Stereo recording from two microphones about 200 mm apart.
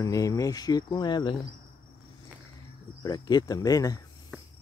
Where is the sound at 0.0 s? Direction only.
15° left (ahead or behind).